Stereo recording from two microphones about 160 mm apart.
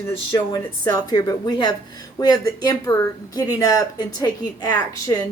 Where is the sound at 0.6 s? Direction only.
20° left (ahead or behind).